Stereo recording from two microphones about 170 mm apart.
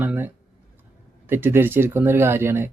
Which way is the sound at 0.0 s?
10° right (ahead or behind).